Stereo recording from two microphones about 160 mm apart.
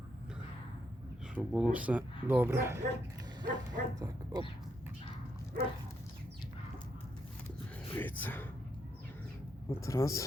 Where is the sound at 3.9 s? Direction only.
25° right (ahead or behind).